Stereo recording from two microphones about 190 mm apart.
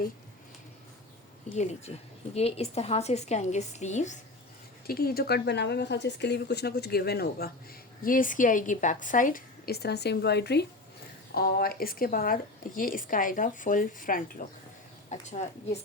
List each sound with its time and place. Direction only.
1.5 s a woman's voice: 35° left (ahead or behind)
4.9 s a woman's voice: 50° left (ahead or behind)